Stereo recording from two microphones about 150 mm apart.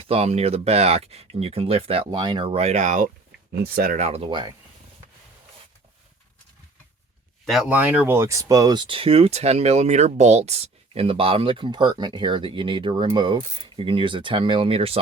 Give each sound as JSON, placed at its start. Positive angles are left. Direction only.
{"t": 0.0, "sound": "speech", "side_deg": -40}
{"t": 2.5, "sound": "speech", "side_deg": -45}
{"t": 3.5, "sound": "speech", "side_deg": -90}
{"t": 3.9, "sound": "speech", "side_deg": -45}
{"t": 7.7, "sound": "speech", "side_deg": -10}